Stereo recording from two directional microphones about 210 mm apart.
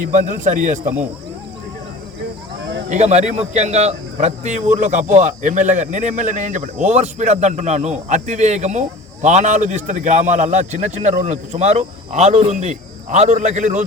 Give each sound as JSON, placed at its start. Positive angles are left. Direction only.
{"t": 0.0, "sound": "a man's voice", "side_deg": -35}
{"t": 2.9, "sound": "a man's voice", "side_deg": -30}